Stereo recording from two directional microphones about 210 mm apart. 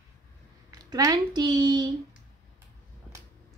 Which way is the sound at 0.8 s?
15° right (ahead or behind).